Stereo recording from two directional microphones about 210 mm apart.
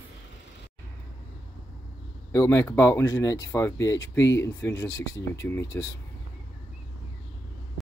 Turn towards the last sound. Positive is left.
turn(degrees=0)  # may be behind; listen again after turning